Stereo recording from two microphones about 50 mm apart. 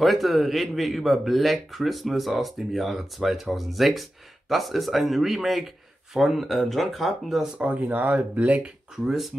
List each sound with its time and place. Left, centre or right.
0.0 s speech: centre
7.5 s speech: right
8.9 s speech: centre